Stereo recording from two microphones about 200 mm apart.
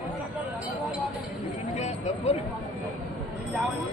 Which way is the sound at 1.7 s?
35° left (ahead or behind).